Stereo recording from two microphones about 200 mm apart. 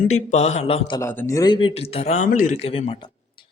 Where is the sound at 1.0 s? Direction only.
10° left (ahead or behind); by 3.0 s 30° left (ahead or behind).